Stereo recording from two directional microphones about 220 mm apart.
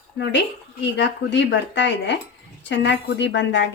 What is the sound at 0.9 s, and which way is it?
Speech, 50° left (ahead or behind).